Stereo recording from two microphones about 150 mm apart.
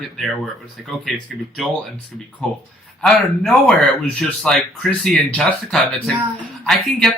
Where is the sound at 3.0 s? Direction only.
5° left (ahead or behind).